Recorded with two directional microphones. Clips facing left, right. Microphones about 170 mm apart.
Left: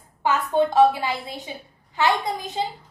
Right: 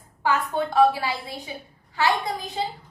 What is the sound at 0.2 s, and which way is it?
A woman's voice, 20° left (ahead or behind).